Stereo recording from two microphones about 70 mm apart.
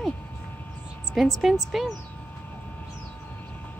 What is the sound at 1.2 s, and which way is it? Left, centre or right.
Speech, centre.